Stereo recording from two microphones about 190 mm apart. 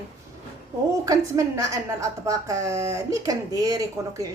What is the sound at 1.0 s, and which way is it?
Speech, 15° right (ahead or behind).